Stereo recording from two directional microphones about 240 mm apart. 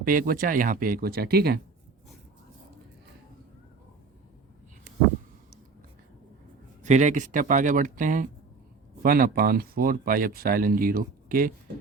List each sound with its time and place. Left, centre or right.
0.0 s speech: right
6.8 s speech: right